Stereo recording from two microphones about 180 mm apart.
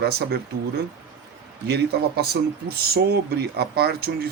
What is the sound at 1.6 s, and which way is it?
Speech, 65° right (ahead or behind).